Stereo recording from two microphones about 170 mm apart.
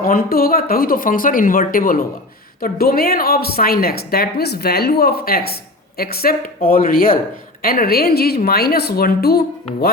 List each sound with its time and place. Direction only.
0.0 s a woman's voice: 60° left (ahead or behind)